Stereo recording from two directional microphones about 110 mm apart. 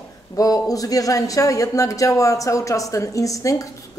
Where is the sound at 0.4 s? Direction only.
30° left (ahead or behind).